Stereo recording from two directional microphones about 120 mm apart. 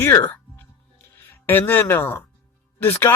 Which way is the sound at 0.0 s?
20° left (ahead or behind).